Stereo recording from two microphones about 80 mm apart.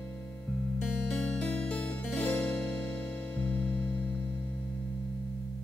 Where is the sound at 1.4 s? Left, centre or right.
Centre.